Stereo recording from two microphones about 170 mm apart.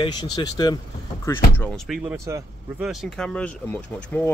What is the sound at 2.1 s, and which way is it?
Speech, 15° right (ahead or behind).